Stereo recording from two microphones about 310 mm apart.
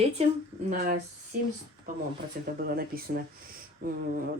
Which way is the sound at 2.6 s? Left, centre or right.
Right.